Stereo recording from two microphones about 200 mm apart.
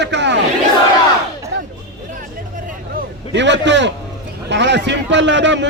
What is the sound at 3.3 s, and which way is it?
A man's voice, 60° right (ahead or behind).